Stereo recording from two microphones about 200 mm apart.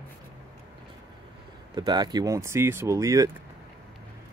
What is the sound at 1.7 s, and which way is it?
Speech, 20° right (ahead or behind).